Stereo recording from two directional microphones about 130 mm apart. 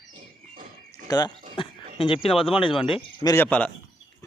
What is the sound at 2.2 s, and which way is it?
Speech, 45° left (ahead or behind).